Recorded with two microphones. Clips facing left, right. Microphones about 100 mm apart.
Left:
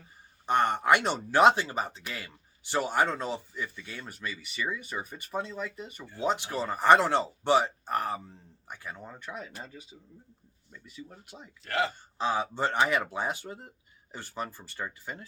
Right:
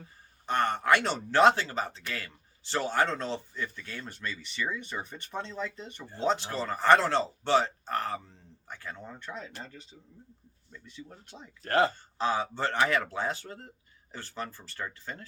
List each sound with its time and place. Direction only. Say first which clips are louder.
0.4 s speech: left 2 dB; 15° left (ahead or behind)
11.6 s speech: right 5 dB; 40° right (ahead or behind)
11.9 s speech: right 1 dB; 15° left (ahead or behind)